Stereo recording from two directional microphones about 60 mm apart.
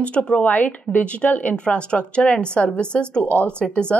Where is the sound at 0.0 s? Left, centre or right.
Centre.